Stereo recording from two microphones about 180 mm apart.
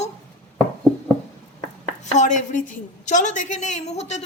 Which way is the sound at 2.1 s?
40° left (ahead or behind).